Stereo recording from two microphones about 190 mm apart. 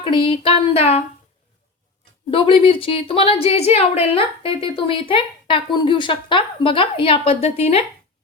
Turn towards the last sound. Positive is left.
turn(degrees=30)  # may be behind; listen again after turning